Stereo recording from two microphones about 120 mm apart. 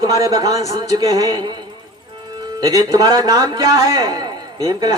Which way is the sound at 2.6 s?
35° right (ahead or behind).